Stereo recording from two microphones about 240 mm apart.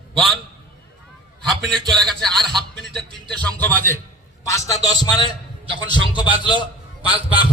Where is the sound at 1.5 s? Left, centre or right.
Centre.